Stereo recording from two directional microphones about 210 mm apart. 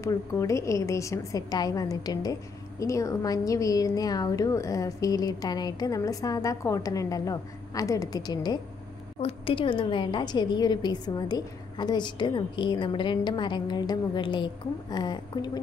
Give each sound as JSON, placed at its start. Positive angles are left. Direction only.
{"t": 0.0, "sound": "a woman's voice", "side_deg": 15}